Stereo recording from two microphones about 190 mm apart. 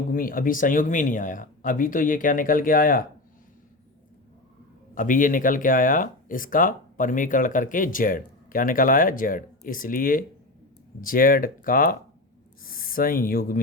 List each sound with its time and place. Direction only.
0.1 s speech: 45° left (ahead or behind)
4.9 s speech: 45° left (ahead or behind)